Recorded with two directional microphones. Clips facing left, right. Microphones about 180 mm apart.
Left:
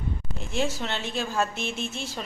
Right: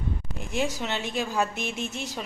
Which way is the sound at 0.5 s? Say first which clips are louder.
Even; 15° right (ahead or behind).